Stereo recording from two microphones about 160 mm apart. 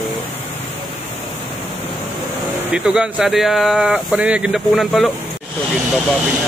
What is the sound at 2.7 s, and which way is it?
Speech, 5° right (ahead or behind).